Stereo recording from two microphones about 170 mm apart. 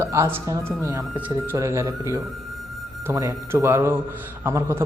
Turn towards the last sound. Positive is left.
turn(degrees=-15)  # may be behind; listen again after turning